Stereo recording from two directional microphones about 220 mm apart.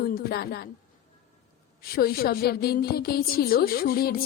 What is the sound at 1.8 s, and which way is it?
A woman's voice, 45° left (ahead or behind).